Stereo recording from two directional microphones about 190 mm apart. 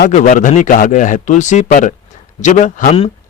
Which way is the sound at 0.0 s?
40° left (ahead or behind).